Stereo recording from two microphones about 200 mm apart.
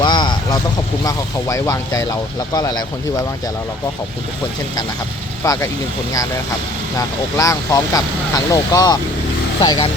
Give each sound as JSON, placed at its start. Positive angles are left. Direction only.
{"t": 0.0, "sound": "vehicle", "side_deg": 20}
{"t": 1.0, "sound": "speech", "side_deg": 15}
{"t": 5.4, "sound": "speech", "side_deg": 15}
{"t": 7.3, "sound": "speech", "side_deg": 15}